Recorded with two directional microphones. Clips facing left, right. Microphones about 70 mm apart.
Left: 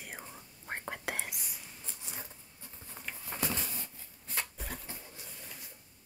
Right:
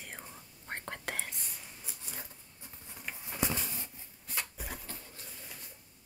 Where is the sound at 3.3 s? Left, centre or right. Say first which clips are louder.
Right 2 dB; centre.